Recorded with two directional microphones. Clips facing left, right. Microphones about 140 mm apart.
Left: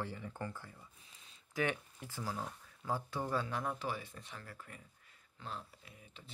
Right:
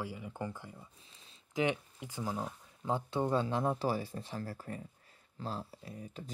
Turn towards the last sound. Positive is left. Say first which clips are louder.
# right 12 dB
turn(degrees=-35)  # may be behind; listen again after turning